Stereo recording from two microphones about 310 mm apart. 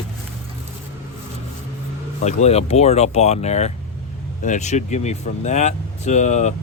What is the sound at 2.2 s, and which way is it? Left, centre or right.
A man's voice, left.